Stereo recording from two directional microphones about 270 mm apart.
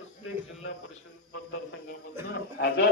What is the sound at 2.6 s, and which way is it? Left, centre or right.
Speech, left.